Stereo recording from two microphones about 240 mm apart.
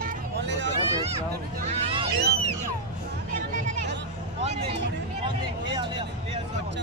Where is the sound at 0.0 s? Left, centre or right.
Right.